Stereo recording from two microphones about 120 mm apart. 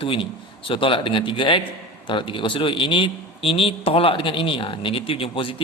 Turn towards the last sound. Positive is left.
turn(degrees=50)  # may be behind; listen again after turning